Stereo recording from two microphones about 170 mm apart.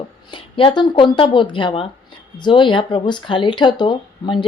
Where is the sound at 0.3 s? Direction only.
30° left (ahead or behind).